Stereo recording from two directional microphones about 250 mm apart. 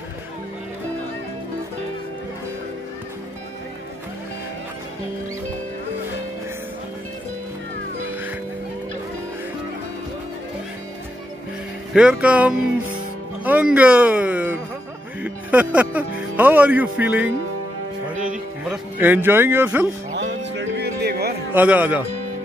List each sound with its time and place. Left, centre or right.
8.1 s music: centre
11.9 s music: centre
13.4 s speech: centre
18.6 s speech: centre
20.5 s music: right
21.5 s speech: centre